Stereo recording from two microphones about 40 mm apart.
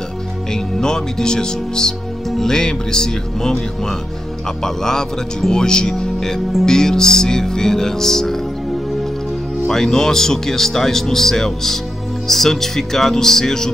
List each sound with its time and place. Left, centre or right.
0.5 s speech: centre
9.7 s speech: centre